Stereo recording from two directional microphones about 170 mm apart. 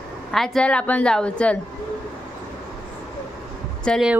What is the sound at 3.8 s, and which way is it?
Speech, 5° left (ahead or behind).